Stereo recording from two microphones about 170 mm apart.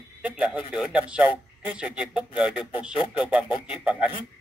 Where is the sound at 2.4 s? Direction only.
5° right (ahead or behind).